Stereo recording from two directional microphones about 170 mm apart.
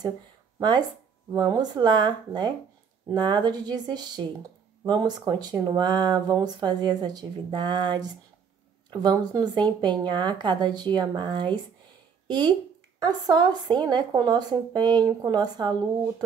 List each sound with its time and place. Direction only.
0.6 s speech: 25° right (ahead or behind)